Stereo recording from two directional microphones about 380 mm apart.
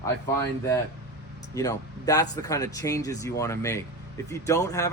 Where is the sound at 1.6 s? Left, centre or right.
Centre.